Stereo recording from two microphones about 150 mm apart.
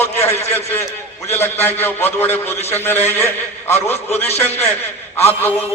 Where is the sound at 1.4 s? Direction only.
15° left (ahead or behind).